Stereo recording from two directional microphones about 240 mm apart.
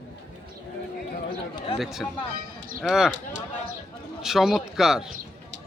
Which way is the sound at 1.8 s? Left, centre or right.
Centre.